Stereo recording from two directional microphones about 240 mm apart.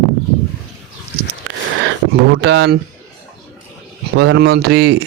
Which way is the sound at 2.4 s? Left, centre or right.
Right.